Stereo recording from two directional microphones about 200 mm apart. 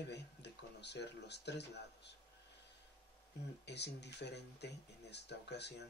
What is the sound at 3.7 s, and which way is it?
Speech, 60° left (ahead or behind).